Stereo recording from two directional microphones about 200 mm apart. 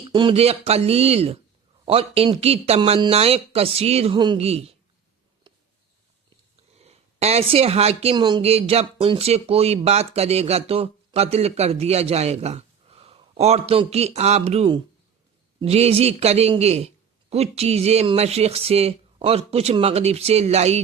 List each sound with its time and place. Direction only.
0.1 s speech: 25° right (ahead or behind)
6.7 s speech: 30° right (ahead or behind)